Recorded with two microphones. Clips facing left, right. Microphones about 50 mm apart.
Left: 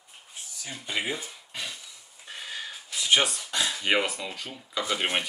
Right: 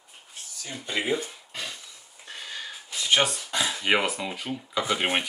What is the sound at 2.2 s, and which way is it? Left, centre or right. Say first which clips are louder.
Gasp: even; centre.